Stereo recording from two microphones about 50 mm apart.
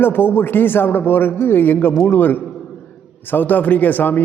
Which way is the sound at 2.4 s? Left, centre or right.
Centre.